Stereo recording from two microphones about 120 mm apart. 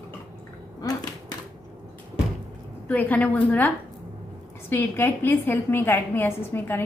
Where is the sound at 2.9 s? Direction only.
15° left (ahead or behind).